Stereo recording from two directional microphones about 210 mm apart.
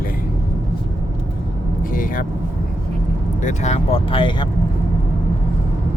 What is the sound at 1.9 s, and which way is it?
Speech, 40° left (ahead or behind).